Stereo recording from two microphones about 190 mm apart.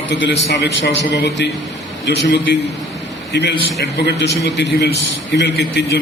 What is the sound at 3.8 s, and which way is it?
A man's voice, 65° left (ahead or behind).